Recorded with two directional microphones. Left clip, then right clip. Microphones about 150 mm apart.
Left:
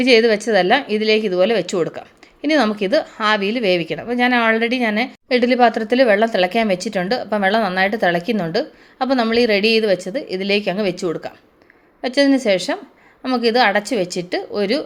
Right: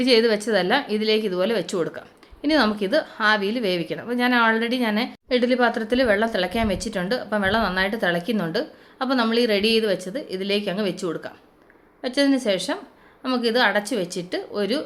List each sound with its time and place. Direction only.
0.0 s a woman's voice: 25° left (ahead or behind)